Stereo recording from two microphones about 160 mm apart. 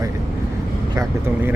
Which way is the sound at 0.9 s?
20° right (ahead or behind).